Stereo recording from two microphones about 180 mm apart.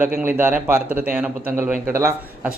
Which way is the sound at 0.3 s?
10° right (ahead or behind).